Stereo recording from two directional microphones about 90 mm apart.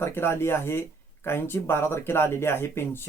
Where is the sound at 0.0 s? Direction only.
25° left (ahead or behind).